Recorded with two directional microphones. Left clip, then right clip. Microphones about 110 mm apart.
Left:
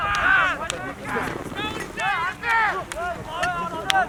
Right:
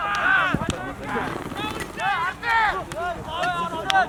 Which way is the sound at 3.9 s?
5° left (ahead or behind).